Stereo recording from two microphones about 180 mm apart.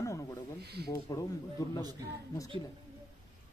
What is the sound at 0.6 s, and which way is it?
Speech, 65° right (ahead or behind).